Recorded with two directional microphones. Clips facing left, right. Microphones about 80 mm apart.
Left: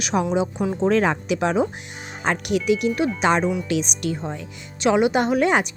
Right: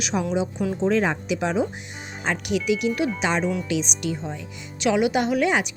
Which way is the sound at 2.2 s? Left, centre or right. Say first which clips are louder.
Left 3 dB; left.